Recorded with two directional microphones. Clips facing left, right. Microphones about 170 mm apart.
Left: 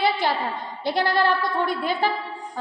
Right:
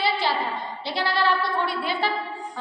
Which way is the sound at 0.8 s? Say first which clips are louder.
Left 4 dB; 50° left (ahead or behind).